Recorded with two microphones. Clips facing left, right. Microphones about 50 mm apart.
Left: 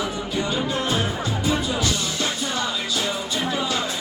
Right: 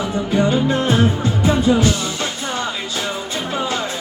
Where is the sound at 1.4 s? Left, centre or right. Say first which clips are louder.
Right 9 dB; right.